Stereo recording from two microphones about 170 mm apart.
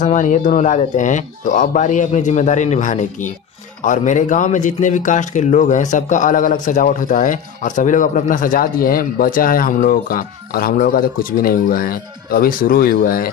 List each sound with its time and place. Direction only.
0.0 s a man's voice: 45° left (ahead or behind)